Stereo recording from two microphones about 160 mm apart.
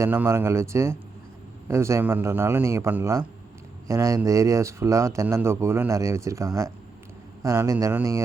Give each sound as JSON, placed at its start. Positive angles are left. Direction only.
{"t": 0.0, "sound": "a man's voice", "side_deg": -15}